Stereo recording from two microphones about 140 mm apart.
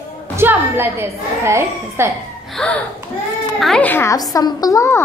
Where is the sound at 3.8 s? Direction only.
15° left (ahead or behind).